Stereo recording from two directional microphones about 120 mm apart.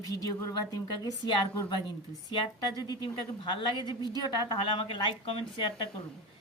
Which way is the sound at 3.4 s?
40° left (ahead or behind).